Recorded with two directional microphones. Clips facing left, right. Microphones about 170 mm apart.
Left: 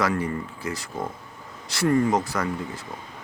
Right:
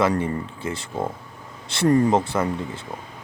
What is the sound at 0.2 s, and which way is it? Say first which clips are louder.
Speech: right 2 dB; 25° right (ahead or behind).